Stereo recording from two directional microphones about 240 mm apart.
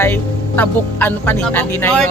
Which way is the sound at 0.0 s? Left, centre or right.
Centre.